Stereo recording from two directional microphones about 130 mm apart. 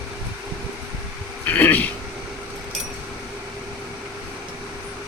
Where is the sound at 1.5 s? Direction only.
15° left (ahead or behind).